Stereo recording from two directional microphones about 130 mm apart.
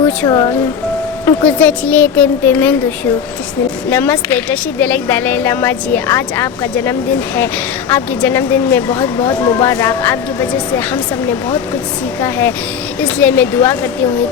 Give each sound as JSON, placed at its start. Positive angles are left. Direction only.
{"t": 0.3, "sound": "speech", "side_deg": 30}
{"t": 1.2, "sound": "a woman's voice", "side_deg": 15}